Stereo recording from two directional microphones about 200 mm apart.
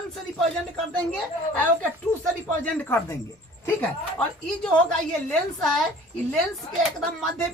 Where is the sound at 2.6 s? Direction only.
10° left (ahead or behind).